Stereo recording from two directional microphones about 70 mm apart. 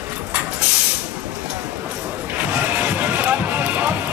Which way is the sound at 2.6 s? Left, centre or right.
Centre.